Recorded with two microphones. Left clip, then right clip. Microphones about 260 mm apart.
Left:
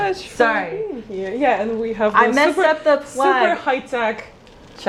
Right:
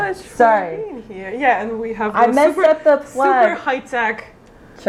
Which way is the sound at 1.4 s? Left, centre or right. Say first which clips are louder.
Right 2 dB; centre.